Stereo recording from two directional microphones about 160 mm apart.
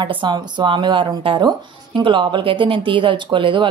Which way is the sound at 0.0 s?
30° right (ahead or behind).